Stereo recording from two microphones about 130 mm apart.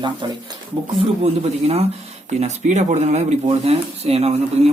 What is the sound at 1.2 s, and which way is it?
Speech, 55° right (ahead or behind).